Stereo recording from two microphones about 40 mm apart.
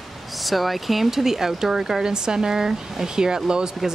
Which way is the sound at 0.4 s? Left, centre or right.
Centre.